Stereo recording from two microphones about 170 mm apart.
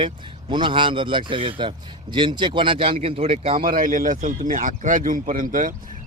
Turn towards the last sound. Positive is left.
turn(degrees=-50)  # may be behind; listen again after turning